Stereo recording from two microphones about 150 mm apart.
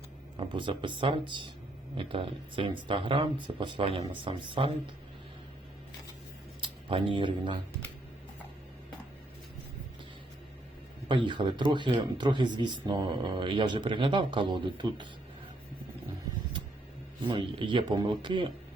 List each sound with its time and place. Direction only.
0.3 s speech: 35° right (ahead or behind)
6.6 s speech: 35° right (ahead or behind)
11.1 s speech: 30° right (ahead or behind)
17.2 s speech: 35° right (ahead or behind)